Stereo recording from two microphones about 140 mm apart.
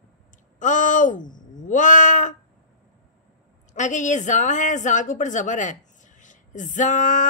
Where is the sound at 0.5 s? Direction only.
65° left (ahead or behind).